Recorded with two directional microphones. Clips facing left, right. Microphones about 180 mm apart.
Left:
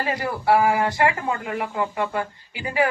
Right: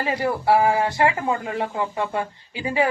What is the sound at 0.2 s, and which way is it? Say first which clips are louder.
Speech: right 1 dB; 25° right (ahead or behind).